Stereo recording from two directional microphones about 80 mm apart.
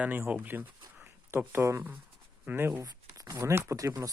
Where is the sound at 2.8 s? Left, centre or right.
Right.